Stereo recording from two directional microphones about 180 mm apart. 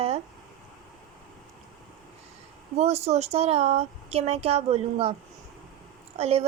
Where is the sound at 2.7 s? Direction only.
35° right (ahead or behind).